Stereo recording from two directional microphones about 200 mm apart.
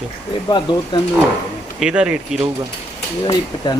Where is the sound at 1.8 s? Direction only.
5° right (ahead or behind).